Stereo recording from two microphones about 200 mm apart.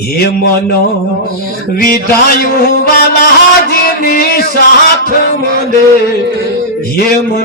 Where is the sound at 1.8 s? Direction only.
50° left (ahead or behind).